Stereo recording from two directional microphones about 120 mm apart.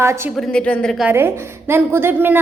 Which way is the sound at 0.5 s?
10° left (ahead or behind).